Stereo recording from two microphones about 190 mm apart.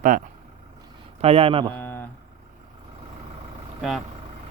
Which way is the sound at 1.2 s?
30° right (ahead or behind).